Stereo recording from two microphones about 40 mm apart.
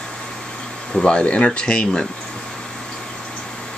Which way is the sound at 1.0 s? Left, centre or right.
Left.